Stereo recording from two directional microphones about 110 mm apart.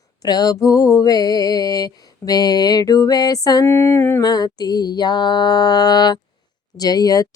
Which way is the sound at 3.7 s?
20° left (ahead or behind).